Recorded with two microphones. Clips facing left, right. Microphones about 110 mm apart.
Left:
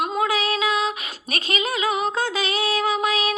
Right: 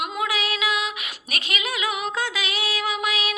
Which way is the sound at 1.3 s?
35° left (ahead or behind).